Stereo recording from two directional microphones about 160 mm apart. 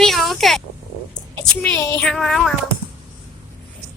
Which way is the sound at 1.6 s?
15° left (ahead or behind).